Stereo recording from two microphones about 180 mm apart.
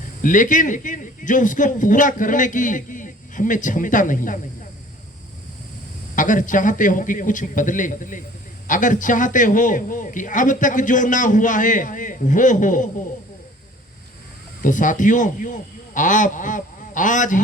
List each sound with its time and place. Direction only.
0.2 s a man's voice: 45° left (ahead or behind)
6.1 s a man's voice: 45° left (ahead or behind)
14.6 s a man's voice: 45° left (ahead or behind)